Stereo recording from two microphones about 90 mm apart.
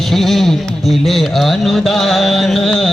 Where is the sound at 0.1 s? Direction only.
5° left (ahead or behind).